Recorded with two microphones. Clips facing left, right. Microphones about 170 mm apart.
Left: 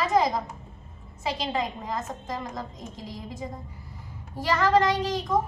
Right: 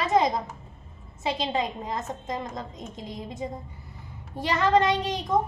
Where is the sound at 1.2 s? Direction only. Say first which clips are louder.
Right 1 dB; 25° right (ahead or behind).